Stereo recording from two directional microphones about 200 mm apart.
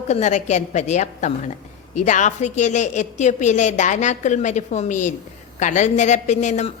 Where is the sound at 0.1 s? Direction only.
35° left (ahead or behind).